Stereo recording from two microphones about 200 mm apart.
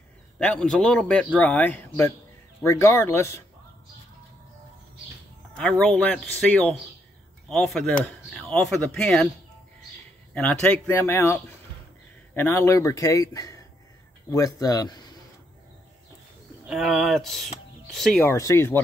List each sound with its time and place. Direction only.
0.4 s a man's voice: 5° left (ahead or behind)
5.6 s speech: 5° left (ahead or behind)
10.3 s a man's voice: 5° left (ahead or behind)
16.6 s speech: centre (ahead or behind)
18.3 s a man's voice: 15° left (ahead or behind)